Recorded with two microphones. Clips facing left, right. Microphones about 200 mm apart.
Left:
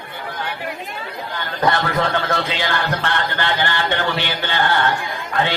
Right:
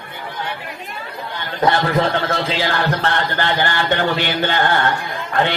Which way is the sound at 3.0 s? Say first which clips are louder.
Right 2 dB; 45° right (ahead or behind).